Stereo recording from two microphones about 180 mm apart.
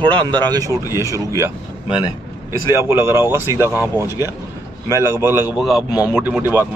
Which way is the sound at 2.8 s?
15° right (ahead or behind).